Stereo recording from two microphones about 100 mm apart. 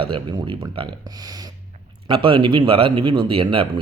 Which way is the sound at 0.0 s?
55° right (ahead or behind).